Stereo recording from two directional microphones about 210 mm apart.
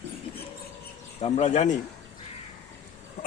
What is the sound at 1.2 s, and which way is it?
Speech, 35° left (ahead or behind).